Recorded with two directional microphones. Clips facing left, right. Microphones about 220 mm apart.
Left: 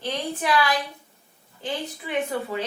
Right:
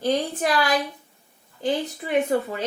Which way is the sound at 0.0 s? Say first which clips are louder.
Right 5 dB; 45° right (ahead or behind).